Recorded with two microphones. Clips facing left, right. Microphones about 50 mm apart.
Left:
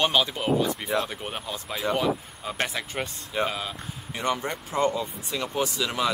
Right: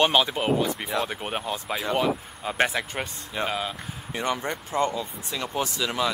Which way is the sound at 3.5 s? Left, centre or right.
Centre.